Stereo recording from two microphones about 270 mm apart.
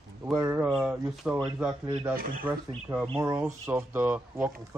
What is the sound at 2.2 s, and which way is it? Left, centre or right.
Speech, right.